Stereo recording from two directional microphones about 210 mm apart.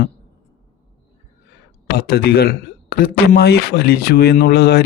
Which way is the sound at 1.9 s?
45° left (ahead or behind).